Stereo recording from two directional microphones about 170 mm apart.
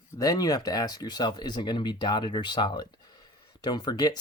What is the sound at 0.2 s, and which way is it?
Speech, 20° left (ahead or behind).